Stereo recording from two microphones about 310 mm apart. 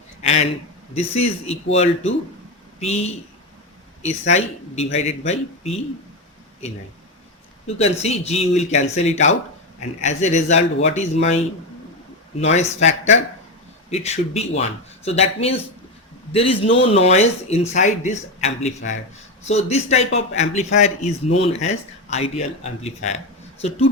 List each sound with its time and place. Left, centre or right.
0.2 s a man's voice: left
1.5 s speech: centre
7.8 s a man's voice: left